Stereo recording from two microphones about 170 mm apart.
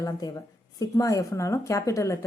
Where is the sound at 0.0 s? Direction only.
20° left (ahead or behind).